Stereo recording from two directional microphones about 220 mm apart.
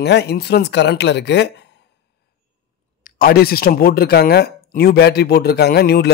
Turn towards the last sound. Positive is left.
turn(degrees=45)  # may be behind; listen again after turning